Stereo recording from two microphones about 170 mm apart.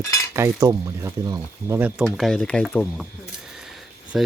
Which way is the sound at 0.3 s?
15° right (ahead or behind).